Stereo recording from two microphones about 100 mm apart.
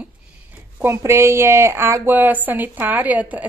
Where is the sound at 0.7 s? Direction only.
25° right (ahead or behind).